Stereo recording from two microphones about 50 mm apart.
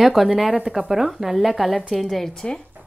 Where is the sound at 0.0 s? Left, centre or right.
Centre.